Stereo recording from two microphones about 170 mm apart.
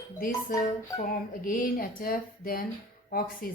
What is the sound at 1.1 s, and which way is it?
Speech, 55° left (ahead or behind).